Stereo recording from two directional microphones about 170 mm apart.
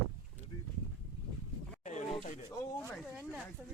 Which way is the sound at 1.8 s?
45° left (ahead or behind).